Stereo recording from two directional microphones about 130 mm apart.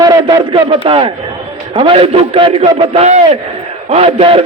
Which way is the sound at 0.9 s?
40° right (ahead or behind).